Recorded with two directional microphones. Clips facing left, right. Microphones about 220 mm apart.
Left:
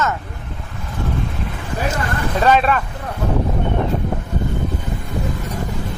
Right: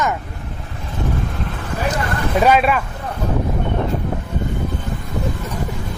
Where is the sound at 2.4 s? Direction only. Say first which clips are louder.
Even; 10° right (ahead or behind).